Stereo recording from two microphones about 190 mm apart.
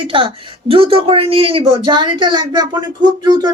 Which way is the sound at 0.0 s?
25° right (ahead or behind).